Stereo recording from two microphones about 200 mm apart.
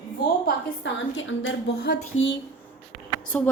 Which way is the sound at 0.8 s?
70° left (ahead or behind).